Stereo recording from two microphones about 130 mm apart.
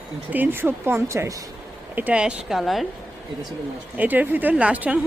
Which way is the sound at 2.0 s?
10° right (ahead or behind).